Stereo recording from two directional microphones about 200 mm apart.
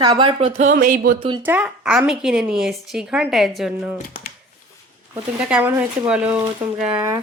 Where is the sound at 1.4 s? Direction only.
5° right (ahead or behind).